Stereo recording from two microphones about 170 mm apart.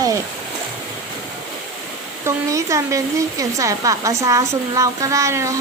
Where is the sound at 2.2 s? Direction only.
20° right (ahead or behind).